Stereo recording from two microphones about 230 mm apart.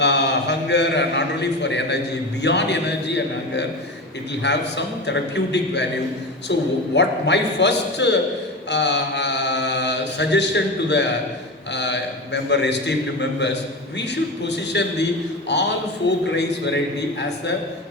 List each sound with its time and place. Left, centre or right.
0.0 s a man's voice: left
4.4 s a man's voice: left
8.7 s mantra: left
11.7 s a sound: left
14.0 s a man's voice: left